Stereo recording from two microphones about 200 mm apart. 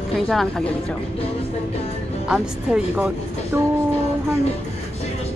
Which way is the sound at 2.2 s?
5° right (ahead or behind).